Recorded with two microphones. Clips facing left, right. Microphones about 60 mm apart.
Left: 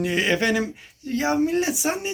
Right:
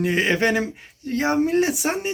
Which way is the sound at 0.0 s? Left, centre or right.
Right.